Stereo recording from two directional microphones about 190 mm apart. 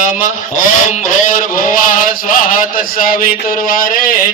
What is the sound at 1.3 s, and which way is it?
Mantra, 45° left (ahead or behind).